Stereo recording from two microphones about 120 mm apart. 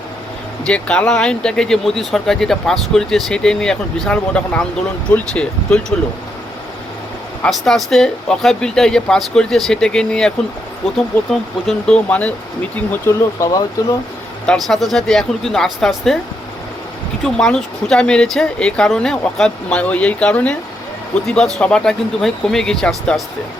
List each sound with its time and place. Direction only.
0.6 s speech: 10° left (ahead or behind)
7.4 s speech: 5° left (ahead or behind)
11.6 s speech: centre (ahead or behind)
11.9 s speech: 10° left (ahead or behind); by 13.9 s 30° left (ahead or behind)
14.4 s speech: 5° left (ahead or behind)
17.2 s speech: 5° left (ahead or behind)